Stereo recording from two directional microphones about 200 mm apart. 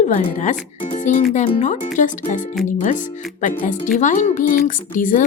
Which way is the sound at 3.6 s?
40° left (ahead or behind).